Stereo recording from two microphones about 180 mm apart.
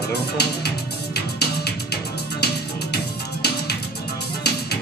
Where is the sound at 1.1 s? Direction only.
60° left (ahead or behind).